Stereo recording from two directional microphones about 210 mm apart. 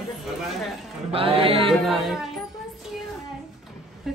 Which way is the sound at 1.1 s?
25° right (ahead or behind).